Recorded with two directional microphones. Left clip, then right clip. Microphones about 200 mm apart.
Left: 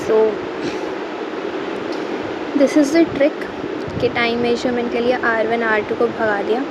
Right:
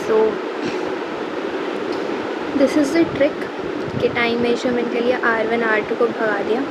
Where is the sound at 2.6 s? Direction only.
15° left (ahead or behind).